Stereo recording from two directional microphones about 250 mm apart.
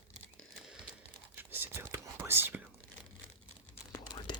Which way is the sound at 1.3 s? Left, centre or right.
Centre.